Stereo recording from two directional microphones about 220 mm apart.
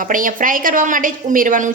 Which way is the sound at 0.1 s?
40° right (ahead or behind).